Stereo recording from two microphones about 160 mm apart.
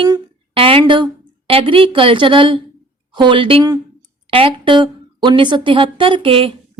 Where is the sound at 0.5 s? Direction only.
35° right (ahead or behind).